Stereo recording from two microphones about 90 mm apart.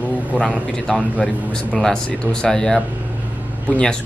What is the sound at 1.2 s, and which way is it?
Speech, 10° left (ahead or behind).